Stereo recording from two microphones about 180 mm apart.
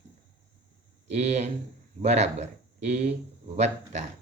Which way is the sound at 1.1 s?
40° right (ahead or behind).